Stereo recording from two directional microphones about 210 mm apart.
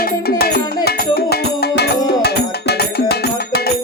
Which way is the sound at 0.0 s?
45° left (ahead or behind).